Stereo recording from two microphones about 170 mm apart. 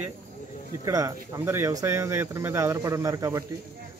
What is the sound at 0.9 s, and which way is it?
A man's voice, 20° right (ahead or behind).